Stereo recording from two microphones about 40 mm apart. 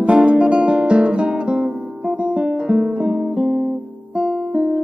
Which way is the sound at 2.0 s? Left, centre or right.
Right.